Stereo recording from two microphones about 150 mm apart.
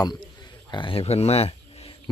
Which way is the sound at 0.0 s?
30° left (ahead or behind).